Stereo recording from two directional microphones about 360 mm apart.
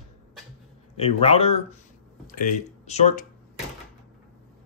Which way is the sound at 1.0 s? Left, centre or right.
Centre.